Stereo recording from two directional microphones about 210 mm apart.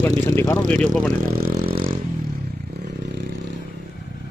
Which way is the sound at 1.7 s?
25° right (ahead or behind).